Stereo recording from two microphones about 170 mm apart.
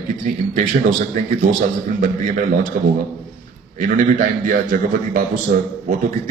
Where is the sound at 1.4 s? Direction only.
55° right (ahead or behind).